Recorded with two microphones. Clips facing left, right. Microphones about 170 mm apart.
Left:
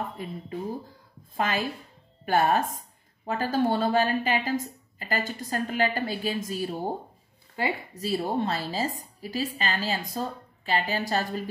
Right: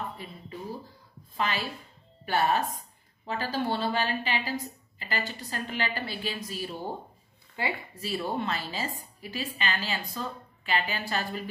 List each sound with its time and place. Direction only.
0.2 s a woman's voice: 50° left (ahead or behind)
7.9 s a woman's voice: 40° left (ahead or behind)